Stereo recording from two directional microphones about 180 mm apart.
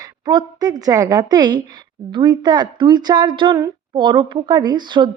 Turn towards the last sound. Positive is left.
turn(degrees=-25)  # may be behind; listen again after turning